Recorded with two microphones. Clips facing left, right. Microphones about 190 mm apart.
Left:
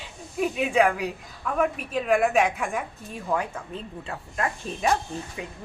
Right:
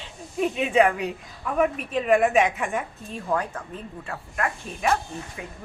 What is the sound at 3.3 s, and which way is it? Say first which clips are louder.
A woman's voice: right 1 dB; 10° left (ahead or behind).